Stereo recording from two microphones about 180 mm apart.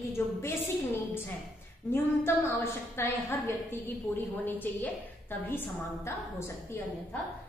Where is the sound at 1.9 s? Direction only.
15° left (ahead or behind).